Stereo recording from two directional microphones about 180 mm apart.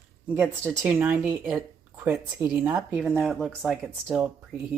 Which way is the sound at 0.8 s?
15° right (ahead or behind).